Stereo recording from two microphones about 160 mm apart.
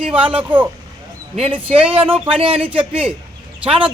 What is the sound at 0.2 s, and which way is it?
Speech, 35° right (ahead or behind).